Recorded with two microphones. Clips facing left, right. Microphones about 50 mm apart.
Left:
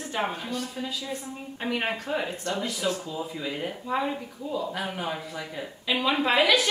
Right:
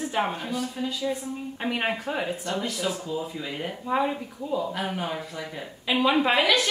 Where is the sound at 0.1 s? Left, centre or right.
Centre.